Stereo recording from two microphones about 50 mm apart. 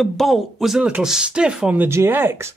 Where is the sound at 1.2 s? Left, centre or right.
Centre.